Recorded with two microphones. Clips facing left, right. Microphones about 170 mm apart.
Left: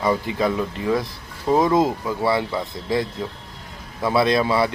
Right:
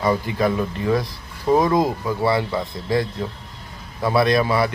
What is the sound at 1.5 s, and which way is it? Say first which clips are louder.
Speech: right 1 dB; 10° right (ahead or behind).